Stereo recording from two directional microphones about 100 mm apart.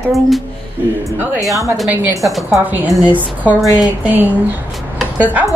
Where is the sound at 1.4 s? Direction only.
35° right (ahead or behind).